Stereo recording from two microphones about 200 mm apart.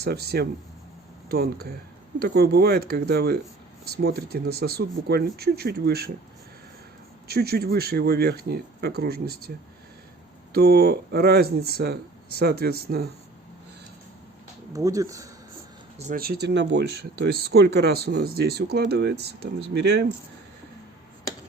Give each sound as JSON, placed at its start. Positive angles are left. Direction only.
{"t": 0.0, "sound": "speech", "side_deg": -55}
{"t": 7.3, "sound": "speech", "side_deg": -50}
{"t": 10.5, "sound": "speech", "side_deg": -55}
{"t": 14.7, "sound": "speech", "side_deg": -15}
{"t": 16.0, "sound": "speech", "side_deg": -40}